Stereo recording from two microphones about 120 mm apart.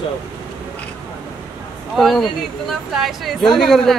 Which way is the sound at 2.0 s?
Centre (ahead or behind).